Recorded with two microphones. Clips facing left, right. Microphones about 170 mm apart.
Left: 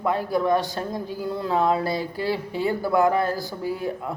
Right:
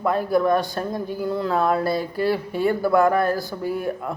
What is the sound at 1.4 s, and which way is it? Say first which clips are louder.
Speech: even; 15° left (ahead or behind).